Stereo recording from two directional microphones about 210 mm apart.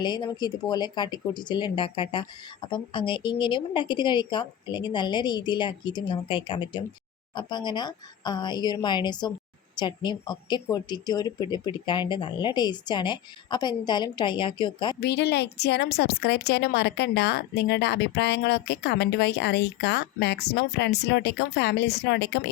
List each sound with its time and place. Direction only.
0.0 s speech: 20° left (ahead or behind)
15.0 s a woman's voice: 50° left (ahead or behind)